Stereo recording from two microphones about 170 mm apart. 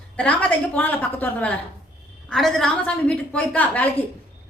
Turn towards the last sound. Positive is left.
turn(degrees=10)  # may be behind; listen again after turning